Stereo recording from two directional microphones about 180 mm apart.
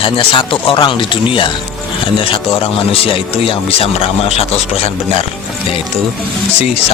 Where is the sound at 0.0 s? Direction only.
30° left (ahead or behind).